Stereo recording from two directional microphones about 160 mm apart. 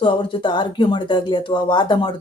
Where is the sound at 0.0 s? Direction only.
30° left (ahead or behind).